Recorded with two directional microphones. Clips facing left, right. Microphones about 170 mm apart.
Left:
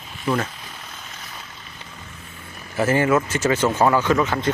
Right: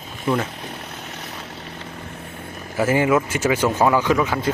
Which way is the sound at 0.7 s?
65° right (ahead or behind).